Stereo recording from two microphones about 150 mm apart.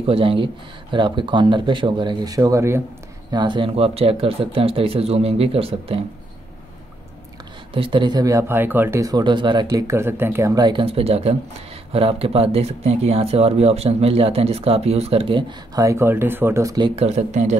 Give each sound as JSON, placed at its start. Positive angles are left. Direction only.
{"t": 0.0, "sound": "speech", "side_deg": -40}
{"t": 3.3, "sound": "speech", "side_deg": -30}
{"t": 7.7, "sound": "speech", "side_deg": -35}
{"t": 15.7, "sound": "speech", "side_deg": -20}
{"t": 16.9, "sound": "speech", "side_deg": -45}